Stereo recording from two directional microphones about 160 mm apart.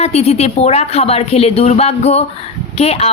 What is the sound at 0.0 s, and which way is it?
Speech, 40° left (ahead or behind).